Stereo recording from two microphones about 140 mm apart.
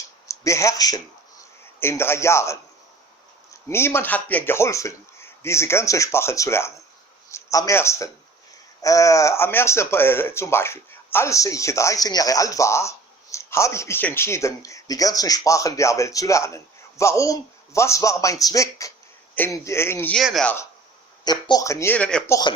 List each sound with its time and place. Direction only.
0.3 s a sound: 20° left (ahead or behind)
1.8 s speech: 15° left (ahead or behind)
20.1 s speech: centre (ahead or behind)
21.2 s speech: 30° left (ahead or behind)
21.9 s speech: 10° left (ahead or behind)
22.3 s speech: 30° left (ahead or behind)